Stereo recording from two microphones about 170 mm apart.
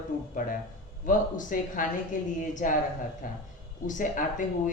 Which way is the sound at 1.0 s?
50° left (ahead or behind).